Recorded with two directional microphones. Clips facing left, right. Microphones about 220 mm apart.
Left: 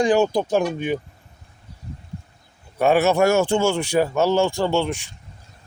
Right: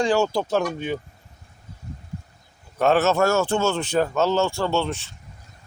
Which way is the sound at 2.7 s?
10° left (ahead or behind).